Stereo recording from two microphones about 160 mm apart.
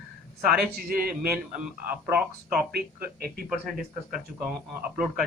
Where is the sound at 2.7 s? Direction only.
70° right (ahead or behind).